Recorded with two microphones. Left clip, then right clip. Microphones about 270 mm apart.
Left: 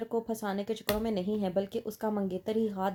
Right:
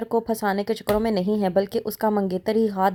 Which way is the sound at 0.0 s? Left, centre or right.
Right.